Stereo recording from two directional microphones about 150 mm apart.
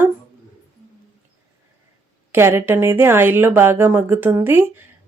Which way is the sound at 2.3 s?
15° right (ahead or behind).